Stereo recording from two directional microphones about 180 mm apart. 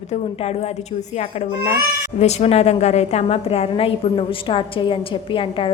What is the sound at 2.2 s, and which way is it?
A woman's voice, 35° left (ahead or behind).